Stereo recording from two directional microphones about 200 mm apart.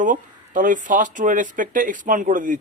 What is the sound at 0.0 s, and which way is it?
Speech, 40° right (ahead or behind).